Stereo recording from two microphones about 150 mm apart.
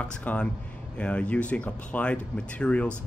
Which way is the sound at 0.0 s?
10° left (ahead or behind).